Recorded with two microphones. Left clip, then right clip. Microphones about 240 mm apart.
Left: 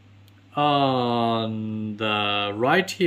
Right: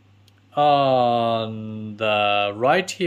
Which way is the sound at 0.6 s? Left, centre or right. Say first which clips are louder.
Right 4 dB; centre.